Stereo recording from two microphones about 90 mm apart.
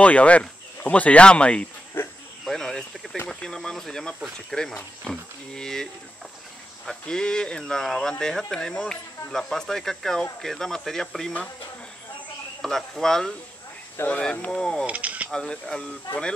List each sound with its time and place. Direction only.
0.0 s speech: 15° left (ahead or behind)
2.0 s a sound: 25° left (ahead or behind)
2.4 s a sound: 5° left (ahead or behind)
3.3 s speech: 5° left (ahead or behind)
6.9 s speech: 10° left (ahead or behind)
12.6 s speech: 5° left (ahead or behind)
14.9 s speech: 15° right (ahead or behind)
15.2 s speech: 10° left (ahead or behind)